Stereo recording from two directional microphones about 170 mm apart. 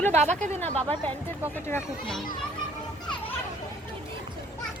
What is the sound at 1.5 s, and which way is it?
Speech, 10° left (ahead or behind).